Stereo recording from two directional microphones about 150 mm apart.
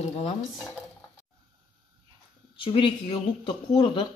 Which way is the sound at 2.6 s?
35° left (ahead or behind).